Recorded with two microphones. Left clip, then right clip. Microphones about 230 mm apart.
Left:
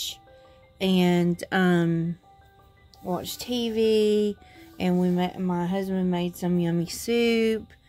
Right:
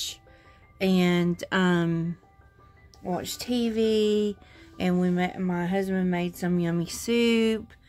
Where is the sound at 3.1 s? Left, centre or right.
Centre.